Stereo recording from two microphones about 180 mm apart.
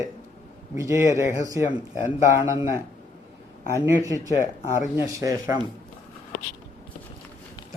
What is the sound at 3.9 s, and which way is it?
Speech, 15° right (ahead or behind).